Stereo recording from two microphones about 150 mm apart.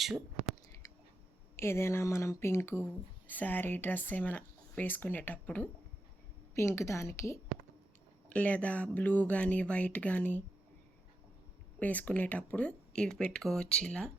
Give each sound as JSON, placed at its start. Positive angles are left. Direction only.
{"t": 1.5, "sound": "a woman's voice", "side_deg": 15}
{"t": 11.8, "sound": "speech", "side_deg": 10}